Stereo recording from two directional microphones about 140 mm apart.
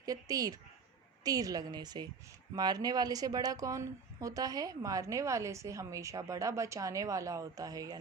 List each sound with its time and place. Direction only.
0.0 s a woman's voice: 25° right (ahead or behind)